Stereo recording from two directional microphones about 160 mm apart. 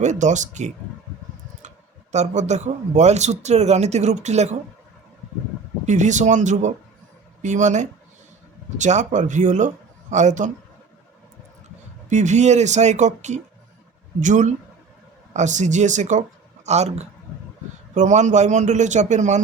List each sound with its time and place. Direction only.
0.0 s speech: 50° right (ahead or behind)
2.1 s speech: 45° right (ahead or behind)
5.8 s speech: 50° right (ahead or behind)
12.0 s speech: 45° right (ahead or behind)